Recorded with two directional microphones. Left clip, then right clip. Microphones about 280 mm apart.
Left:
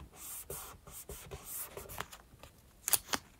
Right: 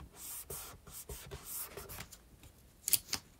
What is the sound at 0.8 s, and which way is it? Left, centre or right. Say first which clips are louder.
Beatboxing: even; centre.